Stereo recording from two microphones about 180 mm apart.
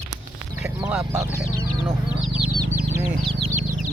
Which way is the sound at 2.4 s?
30° right (ahead or behind).